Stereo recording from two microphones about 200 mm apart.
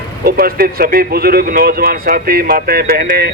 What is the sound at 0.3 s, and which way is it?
Speech, 50° right (ahead or behind).